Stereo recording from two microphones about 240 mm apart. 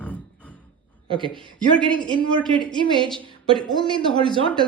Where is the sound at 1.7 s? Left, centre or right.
Centre.